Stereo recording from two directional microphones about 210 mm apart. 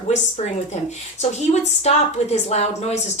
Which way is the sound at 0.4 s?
30° left (ahead or behind).